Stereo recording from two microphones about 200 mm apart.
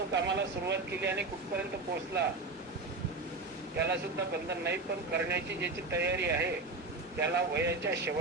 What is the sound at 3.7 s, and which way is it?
Speech, 55° right (ahead or behind).